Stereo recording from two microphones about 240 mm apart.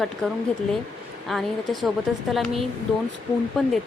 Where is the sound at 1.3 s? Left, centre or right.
Centre.